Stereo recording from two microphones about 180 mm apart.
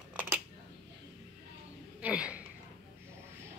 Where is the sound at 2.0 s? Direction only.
5° right (ahead or behind).